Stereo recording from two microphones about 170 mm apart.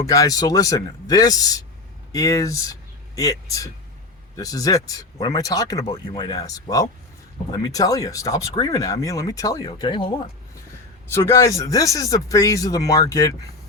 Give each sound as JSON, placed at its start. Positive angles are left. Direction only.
{"t": 0.0, "sound": "speech", "side_deg": 20}
{"t": 11.1, "sound": "speech", "side_deg": 15}